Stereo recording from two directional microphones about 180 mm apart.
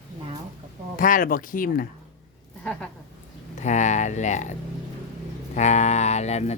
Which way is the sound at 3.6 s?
40° left (ahead or behind).